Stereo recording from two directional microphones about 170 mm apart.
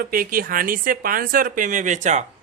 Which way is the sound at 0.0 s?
55° right (ahead or behind).